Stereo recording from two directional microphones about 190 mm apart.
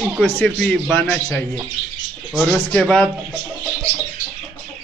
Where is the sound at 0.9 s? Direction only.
15° left (ahead or behind).